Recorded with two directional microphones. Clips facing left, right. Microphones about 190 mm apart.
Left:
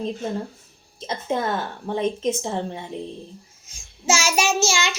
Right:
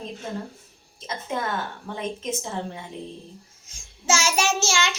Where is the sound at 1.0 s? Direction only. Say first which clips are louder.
Left 5 dB; 30° left (ahead or behind).